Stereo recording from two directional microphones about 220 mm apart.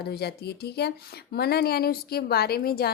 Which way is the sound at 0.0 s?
45° left (ahead or behind).